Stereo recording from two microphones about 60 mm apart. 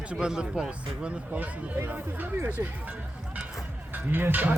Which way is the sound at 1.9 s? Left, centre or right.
Right.